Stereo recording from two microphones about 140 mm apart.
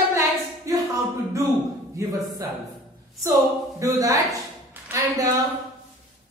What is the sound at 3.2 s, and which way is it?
Speech, 25° right (ahead or behind).